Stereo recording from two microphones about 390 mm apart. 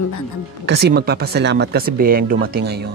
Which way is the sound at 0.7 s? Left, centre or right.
Right.